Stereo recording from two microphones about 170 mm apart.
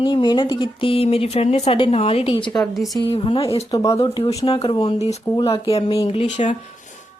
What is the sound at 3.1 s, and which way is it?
Speech, 35° left (ahead or behind).